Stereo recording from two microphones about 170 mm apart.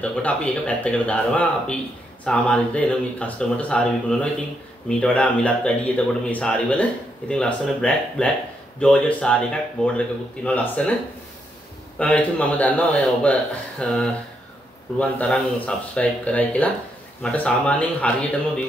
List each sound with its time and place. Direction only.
0.0 s speech: 5° left (ahead or behind)
12.0 s speech: 10° left (ahead or behind)